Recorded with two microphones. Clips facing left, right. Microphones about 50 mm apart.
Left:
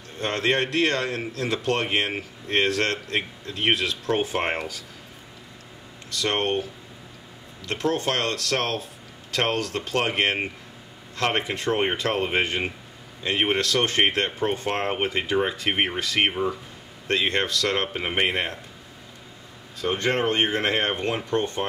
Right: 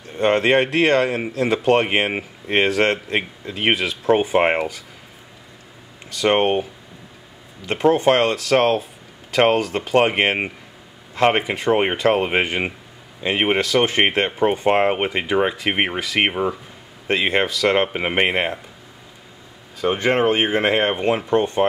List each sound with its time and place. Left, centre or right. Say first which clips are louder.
0.2 s speech: right 8 dB; right
6.0 s speech: right 7 dB; centre
19.8 s speech: right 6 dB; centre